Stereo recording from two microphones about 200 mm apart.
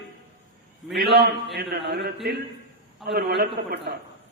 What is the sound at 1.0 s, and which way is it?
A man's voice, 50° right (ahead or behind).